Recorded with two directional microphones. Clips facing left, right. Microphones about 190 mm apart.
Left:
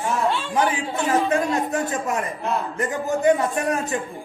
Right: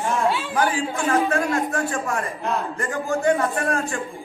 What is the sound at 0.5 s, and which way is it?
A man's voice, 20° left (ahead or behind).